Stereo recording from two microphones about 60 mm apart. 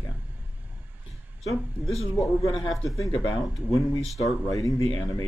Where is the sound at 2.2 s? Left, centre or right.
Left.